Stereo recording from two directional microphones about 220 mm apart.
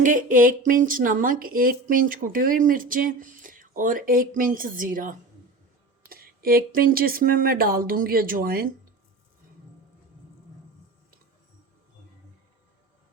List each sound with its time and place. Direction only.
0.0 s speech: 35° right (ahead or behind)